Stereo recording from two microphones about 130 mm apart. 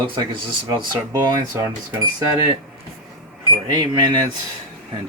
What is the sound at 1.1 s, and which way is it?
Speech, 25° right (ahead or behind).